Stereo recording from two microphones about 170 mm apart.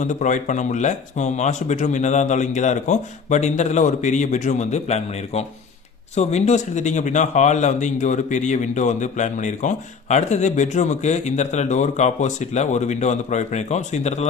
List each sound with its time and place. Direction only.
0.0 s a man's voice: 45° left (ahead or behind)